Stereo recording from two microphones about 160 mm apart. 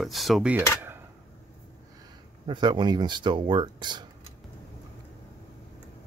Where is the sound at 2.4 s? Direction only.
30° right (ahead or behind).